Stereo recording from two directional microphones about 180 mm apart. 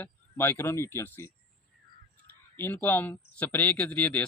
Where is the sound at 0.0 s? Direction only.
15° left (ahead or behind).